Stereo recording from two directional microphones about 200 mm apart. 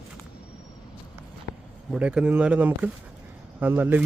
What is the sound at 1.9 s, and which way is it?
Speech, 5° right (ahead or behind).